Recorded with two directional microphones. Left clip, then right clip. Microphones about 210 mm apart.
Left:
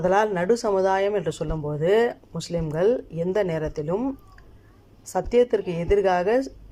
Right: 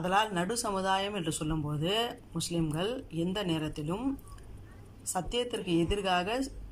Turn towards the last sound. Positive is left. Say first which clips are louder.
# left 10 dB
turn(degrees=25)  # may be behind; listen again after turning